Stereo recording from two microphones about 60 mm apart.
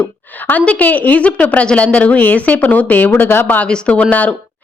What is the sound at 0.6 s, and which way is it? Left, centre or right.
A woman's voice, left.